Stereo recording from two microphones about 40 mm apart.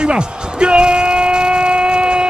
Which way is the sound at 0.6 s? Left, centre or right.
Right.